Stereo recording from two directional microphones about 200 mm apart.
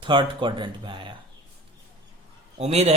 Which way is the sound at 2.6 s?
30° right (ahead or behind).